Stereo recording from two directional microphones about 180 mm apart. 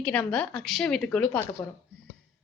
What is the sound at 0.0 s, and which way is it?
A woman's voice, 5° left (ahead or behind).